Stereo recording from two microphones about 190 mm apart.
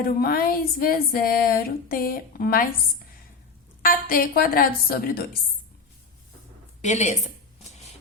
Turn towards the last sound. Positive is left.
turn(degrees=35)  # may be behind; listen again after turning